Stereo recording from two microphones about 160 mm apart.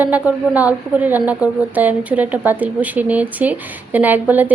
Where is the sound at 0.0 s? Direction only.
10° right (ahead or behind).